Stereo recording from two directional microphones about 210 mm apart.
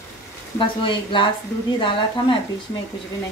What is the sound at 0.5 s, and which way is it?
A woman's voice, 25° left (ahead or behind).